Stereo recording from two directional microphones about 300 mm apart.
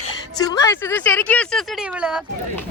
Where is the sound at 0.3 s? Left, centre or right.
Centre.